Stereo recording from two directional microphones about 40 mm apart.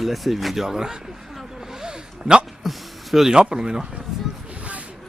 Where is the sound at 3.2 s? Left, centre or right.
Centre.